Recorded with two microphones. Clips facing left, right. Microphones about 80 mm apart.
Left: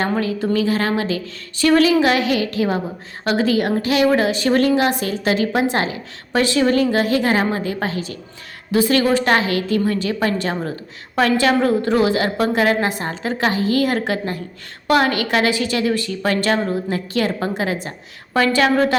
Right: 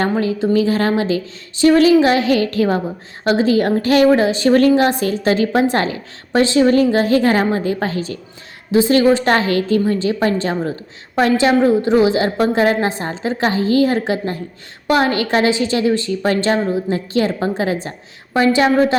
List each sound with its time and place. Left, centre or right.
0.2 s a woman's voice: right
3.8 s a woman's voice: right
4.2 s a woman's voice: right
6.4 s a woman's voice: right
8.7 s a woman's voice: right